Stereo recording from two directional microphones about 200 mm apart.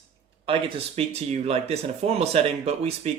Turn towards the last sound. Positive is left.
turn(degrees=-30)  # may be behind; listen again after turning